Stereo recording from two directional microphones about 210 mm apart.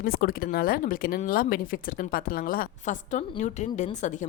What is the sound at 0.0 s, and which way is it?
A woman's voice, 45° left (ahead or behind).